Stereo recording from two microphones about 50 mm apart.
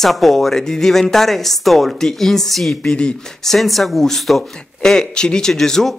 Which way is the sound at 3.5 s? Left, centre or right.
Centre.